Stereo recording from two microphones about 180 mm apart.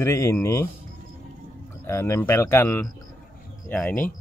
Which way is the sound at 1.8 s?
15° left (ahead or behind).